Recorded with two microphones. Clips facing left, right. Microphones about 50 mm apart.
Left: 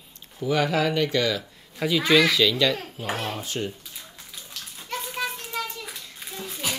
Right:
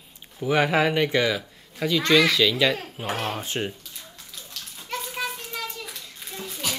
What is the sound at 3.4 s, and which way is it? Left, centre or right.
Speech, right.